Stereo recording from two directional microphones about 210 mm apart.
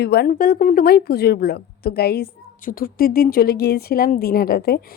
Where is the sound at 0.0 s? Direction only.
50° left (ahead or behind).